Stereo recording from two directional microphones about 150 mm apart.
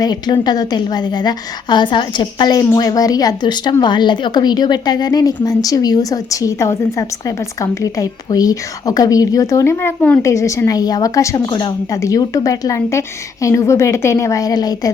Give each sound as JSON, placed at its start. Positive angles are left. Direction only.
{"t": 0.0, "sound": "a woman's voice", "side_deg": 25}